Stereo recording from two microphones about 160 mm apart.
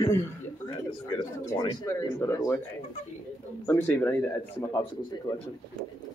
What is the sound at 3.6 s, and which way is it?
Speech, 15° left (ahead or behind).